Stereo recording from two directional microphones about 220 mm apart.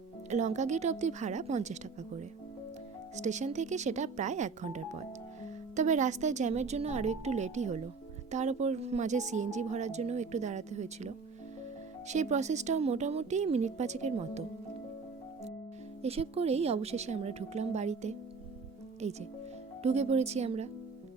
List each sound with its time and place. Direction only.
0.3 s speech: 30° right (ahead or behind)
16.0 s speech: 25° right (ahead or behind)